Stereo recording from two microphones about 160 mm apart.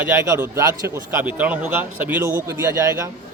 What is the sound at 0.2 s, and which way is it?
A man's voice, 15° right (ahead or behind).